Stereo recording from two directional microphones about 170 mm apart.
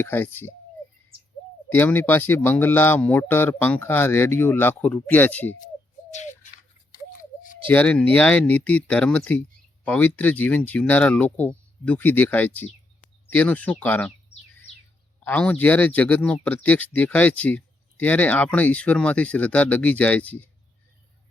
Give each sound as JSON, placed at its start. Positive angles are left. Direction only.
{"t": 0.0, "sound": "speech", "side_deg": 10}
{"t": 1.7, "sound": "speech", "side_deg": 10}
{"t": 6.1, "sound": "bird", "side_deg": 45}
{"t": 7.2, "sound": "a sound", "side_deg": 50}
{"t": 7.7, "sound": "speech", "side_deg": 10}
{"t": 15.2, "sound": "speech", "side_deg": 10}